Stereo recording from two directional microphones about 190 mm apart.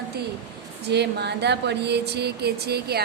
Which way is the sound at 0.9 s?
60° right (ahead or behind).